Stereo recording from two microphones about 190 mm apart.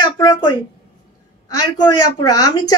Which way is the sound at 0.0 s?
25° left (ahead or behind).